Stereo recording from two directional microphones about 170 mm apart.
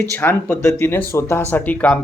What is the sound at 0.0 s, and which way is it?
Speech, 10° left (ahead or behind).